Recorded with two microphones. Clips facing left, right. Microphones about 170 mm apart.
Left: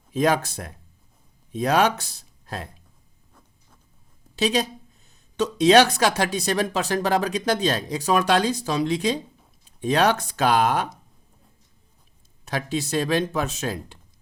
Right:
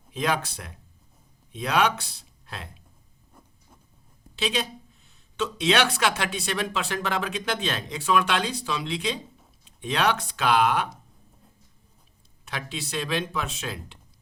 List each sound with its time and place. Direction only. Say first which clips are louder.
0.1 s speech: left 6 dB; 45° left (ahead or behind)
4.4 s speech: left 6 dB; 40° left (ahead or behind)
12.5 s speech: left 8 dB; 40° left (ahead or behind)